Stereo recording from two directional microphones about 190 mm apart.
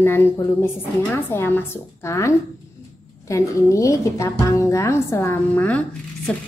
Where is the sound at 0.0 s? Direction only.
10° left (ahead or behind).